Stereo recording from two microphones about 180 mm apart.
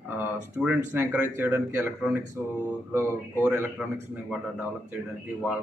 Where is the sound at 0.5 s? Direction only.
10° right (ahead or behind).